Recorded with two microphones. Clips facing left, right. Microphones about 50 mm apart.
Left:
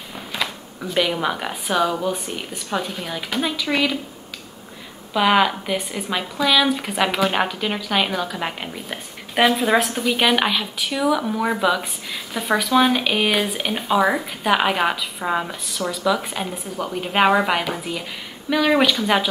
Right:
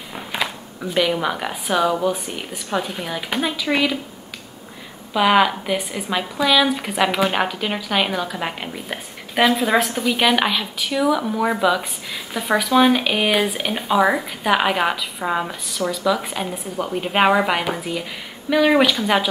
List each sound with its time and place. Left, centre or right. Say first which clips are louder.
0.1 s a sound: right 2 dB; centre
0.9 s speech: right 1 dB; centre
5.1 s speech: right 1 dB; centre